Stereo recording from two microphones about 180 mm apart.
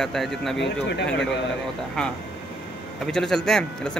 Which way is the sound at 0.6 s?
70° left (ahead or behind).